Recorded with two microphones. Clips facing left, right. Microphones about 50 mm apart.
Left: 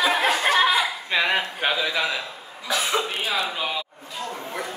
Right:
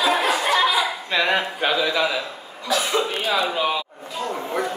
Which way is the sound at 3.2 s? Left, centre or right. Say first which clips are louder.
Right 4 dB; centre.